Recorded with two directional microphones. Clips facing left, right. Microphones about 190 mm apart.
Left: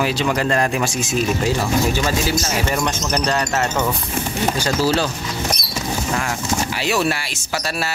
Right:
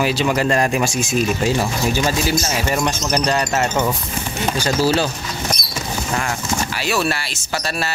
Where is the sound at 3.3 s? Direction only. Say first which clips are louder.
Right 1 dB; 15° right (ahead or behind).